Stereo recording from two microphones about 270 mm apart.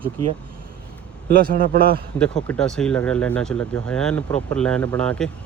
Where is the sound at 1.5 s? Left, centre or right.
Right.